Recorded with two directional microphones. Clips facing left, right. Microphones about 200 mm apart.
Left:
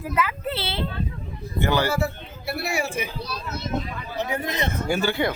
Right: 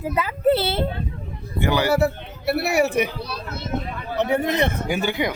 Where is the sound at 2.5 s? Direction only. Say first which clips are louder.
Right 7 dB; 70° right (ahead or behind).